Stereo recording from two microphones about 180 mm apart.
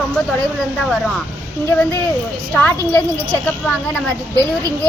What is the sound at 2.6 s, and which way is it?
Speech, 10° left (ahead or behind).